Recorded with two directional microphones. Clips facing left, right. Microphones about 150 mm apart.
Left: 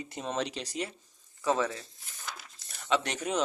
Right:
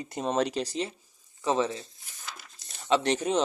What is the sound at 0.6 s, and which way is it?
Speech, 30° right (ahead or behind).